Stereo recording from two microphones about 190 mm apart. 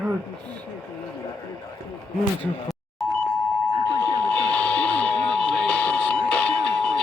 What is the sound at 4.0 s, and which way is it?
Alarm, 10° left (ahead or behind).